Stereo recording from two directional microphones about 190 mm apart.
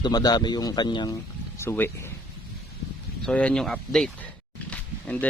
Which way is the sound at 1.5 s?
10° left (ahead or behind).